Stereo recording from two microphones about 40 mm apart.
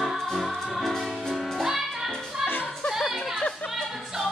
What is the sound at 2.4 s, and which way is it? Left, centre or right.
Music, left.